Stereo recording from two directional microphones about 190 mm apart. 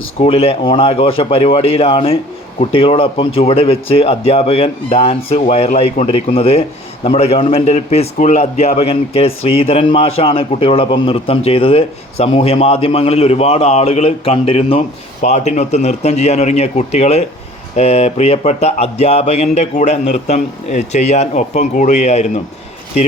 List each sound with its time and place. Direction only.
0.2 s speech: 30° left (ahead or behind)